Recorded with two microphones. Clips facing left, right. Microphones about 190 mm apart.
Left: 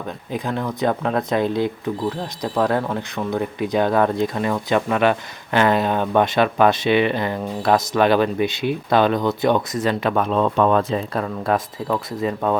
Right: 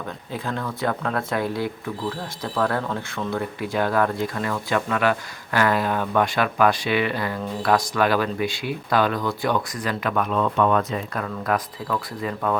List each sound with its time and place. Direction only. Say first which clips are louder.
0.3 s speech: left 5 dB; 15° left (ahead or behind)